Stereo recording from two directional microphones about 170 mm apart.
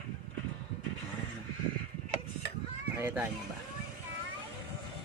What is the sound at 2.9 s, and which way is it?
Speech, 15° right (ahead or behind).